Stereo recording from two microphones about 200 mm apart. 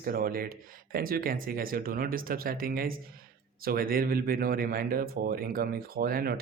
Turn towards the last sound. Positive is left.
turn(degrees=-50)  # may be behind; listen again after turning